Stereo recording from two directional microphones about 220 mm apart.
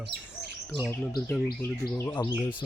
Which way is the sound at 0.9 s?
10° left (ahead or behind).